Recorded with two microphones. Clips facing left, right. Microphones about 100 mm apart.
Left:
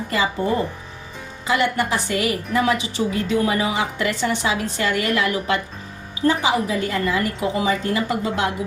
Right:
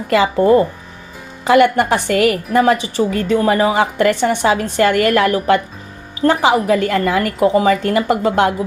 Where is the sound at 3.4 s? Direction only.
40° right (ahead or behind).